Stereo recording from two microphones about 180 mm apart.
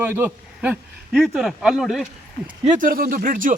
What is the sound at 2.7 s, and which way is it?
Speech, 50° right (ahead or behind).